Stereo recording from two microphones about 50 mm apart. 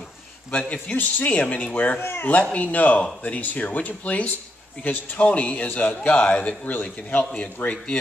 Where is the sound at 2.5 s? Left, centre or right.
Left.